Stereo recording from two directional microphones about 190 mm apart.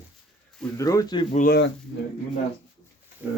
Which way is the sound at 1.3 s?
50° left (ahead or behind).